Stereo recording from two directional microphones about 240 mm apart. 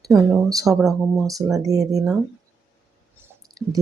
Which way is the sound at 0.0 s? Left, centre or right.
Centre.